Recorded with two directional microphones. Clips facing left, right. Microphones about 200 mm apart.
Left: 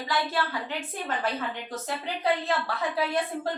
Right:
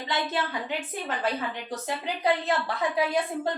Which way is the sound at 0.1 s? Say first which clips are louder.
Even; 20° right (ahead or behind).